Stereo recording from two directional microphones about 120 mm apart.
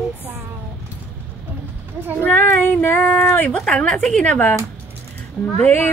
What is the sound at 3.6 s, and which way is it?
Female singing, 5° left (ahead or behind).